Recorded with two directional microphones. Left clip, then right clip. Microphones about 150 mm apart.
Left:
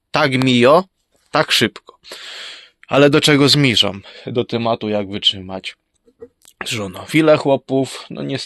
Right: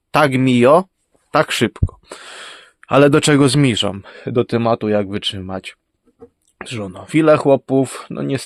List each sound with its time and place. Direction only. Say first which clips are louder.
0.1 s speech: right 1 dB; 25° right (ahead or behind)
4.0 s speech: right 2 dB; 50° right (ahead or behind)
6.6 s speech: left 4 dB; 10° right (ahead or behind)
7.3 s speech: right 2 dB; 45° right (ahead or behind)